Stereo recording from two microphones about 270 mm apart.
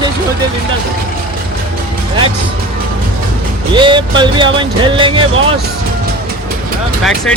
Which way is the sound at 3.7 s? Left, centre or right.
Centre.